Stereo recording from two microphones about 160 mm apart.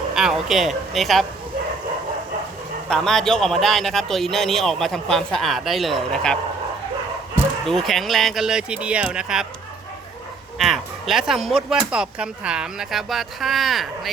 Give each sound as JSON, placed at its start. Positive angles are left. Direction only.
{"t": 0.1, "sound": "speech", "side_deg": -5}
{"t": 2.9, "sound": "speech", "side_deg": 5}
{"t": 7.6, "sound": "speech", "side_deg": 0}
{"t": 10.6, "sound": "speech", "side_deg": 0}